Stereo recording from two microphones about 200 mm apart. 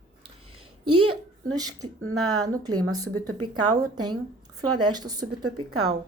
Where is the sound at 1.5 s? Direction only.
20° right (ahead or behind).